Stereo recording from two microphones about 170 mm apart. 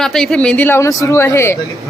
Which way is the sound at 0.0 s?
Centre (ahead or behind).